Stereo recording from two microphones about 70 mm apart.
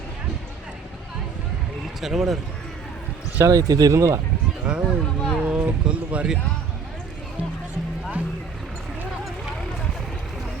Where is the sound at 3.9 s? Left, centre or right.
Right.